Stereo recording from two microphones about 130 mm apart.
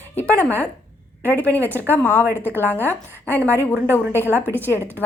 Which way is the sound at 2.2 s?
15° right (ahead or behind).